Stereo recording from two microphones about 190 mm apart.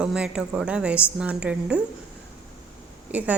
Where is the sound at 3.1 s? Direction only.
10° right (ahead or behind).